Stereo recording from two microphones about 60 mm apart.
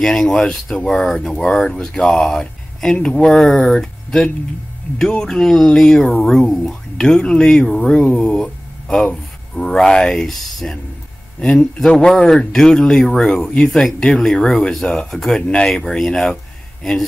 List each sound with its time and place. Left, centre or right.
0.0 s speech: centre